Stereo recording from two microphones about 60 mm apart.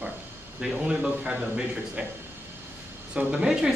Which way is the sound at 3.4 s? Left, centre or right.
Centre.